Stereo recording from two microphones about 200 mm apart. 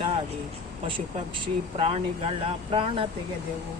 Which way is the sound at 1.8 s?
30° right (ahead or behind).